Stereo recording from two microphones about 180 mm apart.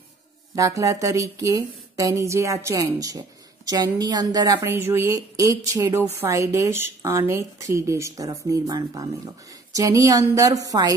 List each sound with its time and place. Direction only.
0.6 s a woman's voice: 15° right (ahead or behind)